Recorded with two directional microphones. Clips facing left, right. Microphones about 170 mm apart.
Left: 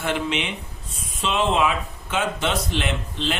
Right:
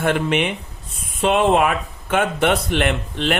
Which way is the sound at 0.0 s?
55° right (ahead or behind).